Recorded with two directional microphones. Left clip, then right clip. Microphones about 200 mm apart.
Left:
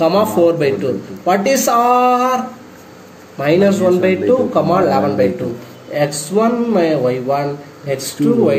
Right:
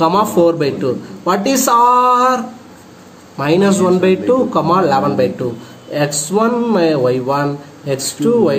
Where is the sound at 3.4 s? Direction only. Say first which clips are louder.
Left 1 dB; 50° right (ahead or behind).